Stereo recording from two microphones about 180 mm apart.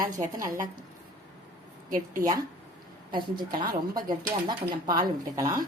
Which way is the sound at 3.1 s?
25° right (ahead or behind).